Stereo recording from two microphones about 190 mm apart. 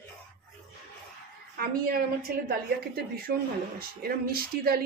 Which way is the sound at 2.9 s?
55° right (ahead or behind).